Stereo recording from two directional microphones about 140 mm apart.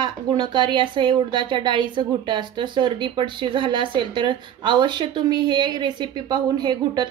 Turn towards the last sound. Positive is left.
turn(degrees=-30)  # may be behind; listen again after turning